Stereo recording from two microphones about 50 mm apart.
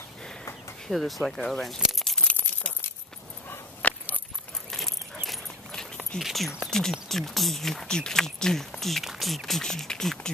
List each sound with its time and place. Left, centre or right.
0.8 s speech: centre
1.8 s a sound: centre
3.8 s keys jangling: left
4.6 s dog: centre
5.7 s a sound: centre
6.2 s speech: centre